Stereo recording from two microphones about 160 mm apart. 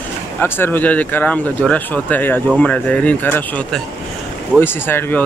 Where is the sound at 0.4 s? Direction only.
10° left (ahead or behind).